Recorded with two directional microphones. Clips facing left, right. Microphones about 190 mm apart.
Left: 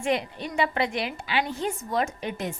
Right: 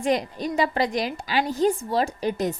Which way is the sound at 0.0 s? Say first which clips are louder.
Right 3 dB; 40° right (ahead or behind).